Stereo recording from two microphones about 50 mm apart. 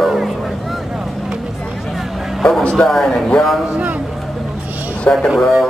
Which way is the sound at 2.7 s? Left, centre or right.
Centre.